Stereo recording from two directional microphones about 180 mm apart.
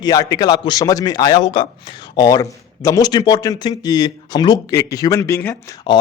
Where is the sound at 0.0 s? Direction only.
20° left (ahead or behind).